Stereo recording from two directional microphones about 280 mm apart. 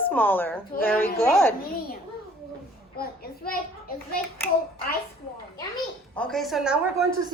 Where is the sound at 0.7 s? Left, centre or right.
Left.